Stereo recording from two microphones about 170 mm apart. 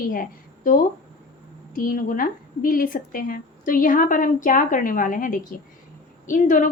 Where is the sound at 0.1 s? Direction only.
55° left (ahead or behind).